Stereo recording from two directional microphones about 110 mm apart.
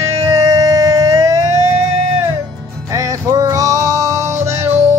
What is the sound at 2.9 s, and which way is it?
Music, 30° right (ahead or behind).